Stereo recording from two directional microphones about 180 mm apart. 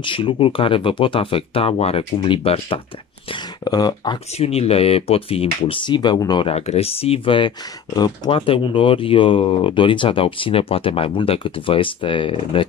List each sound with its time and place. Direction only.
0.0 s speech: 25° left (ahead or behind)
4.4 s speech: 35° left (ahead or behind)